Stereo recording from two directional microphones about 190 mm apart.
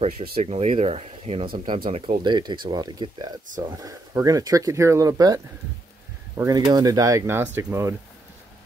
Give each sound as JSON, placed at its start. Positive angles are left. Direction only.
{"t": 0.3, "sound": "speech", "side_deg": -35}
{"t": 1.9, "sound": "speech", "side_deg": -35}
{"t": 2.2, "sound": "speech", "side_deg": -25}